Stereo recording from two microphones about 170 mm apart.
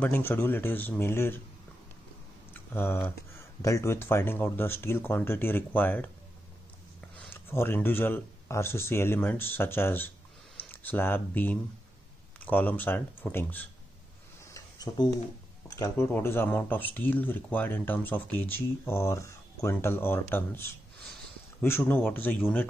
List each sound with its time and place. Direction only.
0.0 s speech: 10° left (ahead or behind)
2.5 s speech: 15° left (ahead or behind)
14.5 s a sound: 20° left (ahead or behind)
15.7 s speech: 15° left (ahead or behind)